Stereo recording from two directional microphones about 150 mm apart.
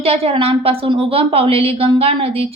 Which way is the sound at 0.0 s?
40° right (ahead or behind).